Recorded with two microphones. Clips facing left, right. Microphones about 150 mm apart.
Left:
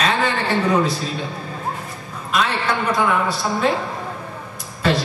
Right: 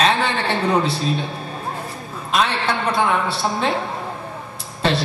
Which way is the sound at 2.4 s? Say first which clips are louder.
Even; 30° right (ahead or behind).